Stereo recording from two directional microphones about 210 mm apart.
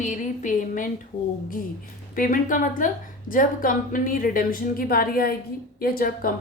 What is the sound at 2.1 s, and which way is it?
A woman's voice, 40° left (ahead or behind).